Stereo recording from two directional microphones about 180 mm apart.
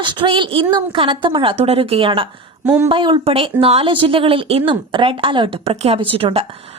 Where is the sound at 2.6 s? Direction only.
10° right (ahead or behind).